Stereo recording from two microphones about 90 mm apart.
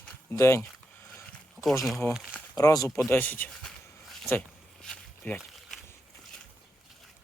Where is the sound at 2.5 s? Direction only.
40° left (ahead or behind).